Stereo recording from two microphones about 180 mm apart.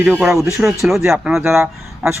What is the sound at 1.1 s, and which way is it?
Speech, 5° right (ahead or behind).